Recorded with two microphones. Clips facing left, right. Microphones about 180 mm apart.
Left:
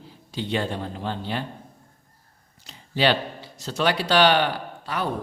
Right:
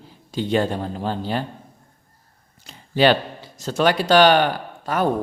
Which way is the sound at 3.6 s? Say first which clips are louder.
Right 5 dB; 50° right (ahead or behind).